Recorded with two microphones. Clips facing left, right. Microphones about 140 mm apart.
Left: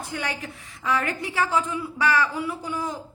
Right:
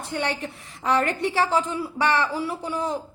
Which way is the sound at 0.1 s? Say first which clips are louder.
Right 6 dB; 30° right (ahead or behind).